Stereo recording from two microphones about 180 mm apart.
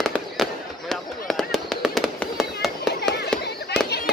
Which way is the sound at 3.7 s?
65° left (ahead or behind).